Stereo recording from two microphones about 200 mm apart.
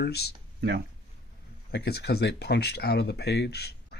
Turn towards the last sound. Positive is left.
turn(degrees=55)  # may be behind; listen again after turning